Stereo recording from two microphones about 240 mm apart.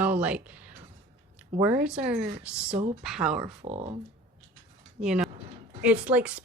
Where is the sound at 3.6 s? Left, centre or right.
Right.